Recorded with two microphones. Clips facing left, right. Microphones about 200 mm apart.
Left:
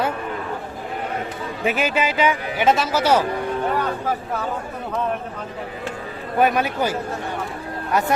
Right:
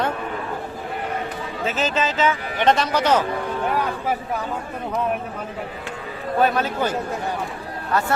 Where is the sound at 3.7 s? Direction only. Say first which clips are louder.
Even; 10° right (ahead or behind).